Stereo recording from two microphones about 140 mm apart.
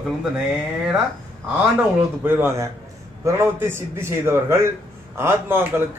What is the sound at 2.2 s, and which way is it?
A man's voice, 15° right (ahead or behind).